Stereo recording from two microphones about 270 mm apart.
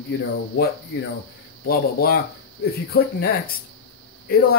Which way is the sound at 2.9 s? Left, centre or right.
Left.